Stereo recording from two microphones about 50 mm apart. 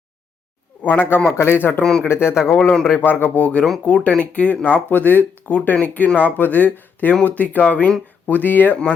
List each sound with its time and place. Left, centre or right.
0.8 s speech: left
1.4 s a man's voice: left
1.8 s speech: centre
2.0 s a man's voice: left
2.6 s speech: centre
3.0 s speech: left